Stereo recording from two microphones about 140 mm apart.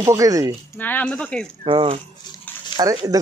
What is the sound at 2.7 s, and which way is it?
Speech, 25° right (ahead or behind).